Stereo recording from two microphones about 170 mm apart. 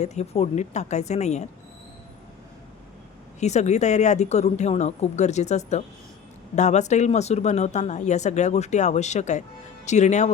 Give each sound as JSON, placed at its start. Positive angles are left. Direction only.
{"t": 0.0, "sound": "speech", "side_deg": 40}
{"t": 3.4, "sound": "speech", "side_deg": 40}